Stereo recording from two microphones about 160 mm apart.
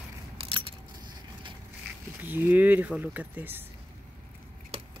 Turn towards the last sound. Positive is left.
turn(degrees=-10)  # may be behind; listen again after turning